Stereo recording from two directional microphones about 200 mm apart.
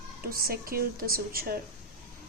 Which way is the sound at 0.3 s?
45° right (ahead or behind).